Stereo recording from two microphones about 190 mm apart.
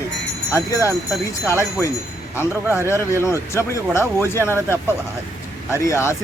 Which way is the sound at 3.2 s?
15° left (ahead or behind).